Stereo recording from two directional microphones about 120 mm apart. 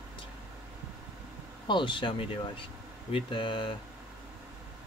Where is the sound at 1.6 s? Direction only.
40° left (ahead or behind).